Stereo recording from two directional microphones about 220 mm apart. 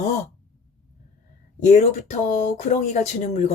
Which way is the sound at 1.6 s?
30° left (ahead or behind).